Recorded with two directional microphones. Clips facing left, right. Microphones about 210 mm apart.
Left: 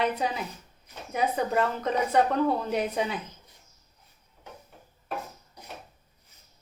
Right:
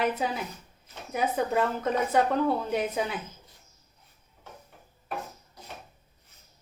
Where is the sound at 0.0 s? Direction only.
5° right (ahead or behind).